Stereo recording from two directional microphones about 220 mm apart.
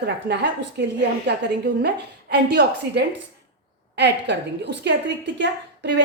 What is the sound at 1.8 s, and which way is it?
A woman's voice, 50° right (ahead or behind).